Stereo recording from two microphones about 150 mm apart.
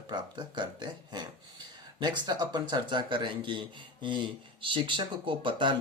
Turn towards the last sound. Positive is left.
turn(degrees=-35)  # may be behind; listen again after turning